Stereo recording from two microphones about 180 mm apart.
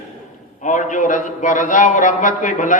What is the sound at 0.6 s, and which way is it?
A man's voice, 45° left (ahead or behind).